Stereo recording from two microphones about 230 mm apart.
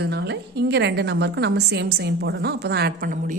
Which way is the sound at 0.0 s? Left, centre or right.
Right.